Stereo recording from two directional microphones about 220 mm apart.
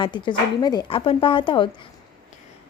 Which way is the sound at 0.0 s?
20° left (ahead or behind).